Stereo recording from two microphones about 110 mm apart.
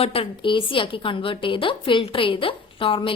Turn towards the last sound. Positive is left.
turn(degrees=50)  # may be behind; listen again after turning